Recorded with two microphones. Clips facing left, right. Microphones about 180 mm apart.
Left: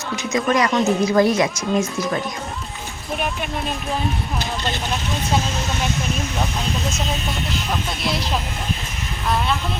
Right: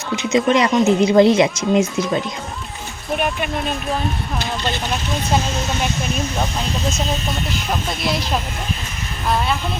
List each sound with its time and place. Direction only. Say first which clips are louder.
0.3 s speech: right 3 dB; 25° right (ahead or behind)